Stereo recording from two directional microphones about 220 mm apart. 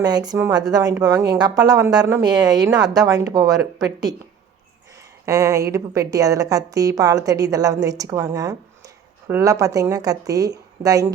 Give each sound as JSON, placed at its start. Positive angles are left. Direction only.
{"t": 0.0, "sound": "a woman's voice", "side_deg": -15}
{"t": 5.2, "sound": "a woman's voice", "side_deg": -15}